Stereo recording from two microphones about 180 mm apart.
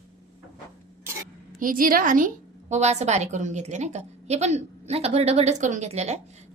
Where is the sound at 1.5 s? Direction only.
50° right (ahead or behind).